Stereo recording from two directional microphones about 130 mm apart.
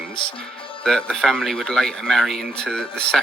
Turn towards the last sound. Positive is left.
turn(degrees=5)  # may be behind; listen again after turning